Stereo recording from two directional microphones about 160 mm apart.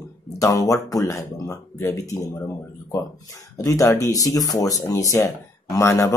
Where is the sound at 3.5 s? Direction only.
20° left (ahead or behind).